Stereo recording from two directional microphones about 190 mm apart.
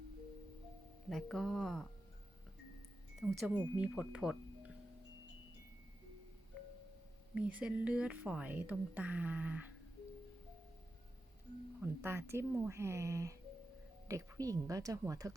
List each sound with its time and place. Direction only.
1.1 s speech: centre (ahead or behind)
3.2 s speech: 5° right (ahead or behind)
7.3 s a woman's voice: 5° right (ahead or behind)
11.8 s a woman's voice: 10° right (ahead or behind)